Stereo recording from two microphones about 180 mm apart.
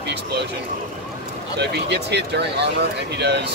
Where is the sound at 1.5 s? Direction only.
70° right (ahead or behind).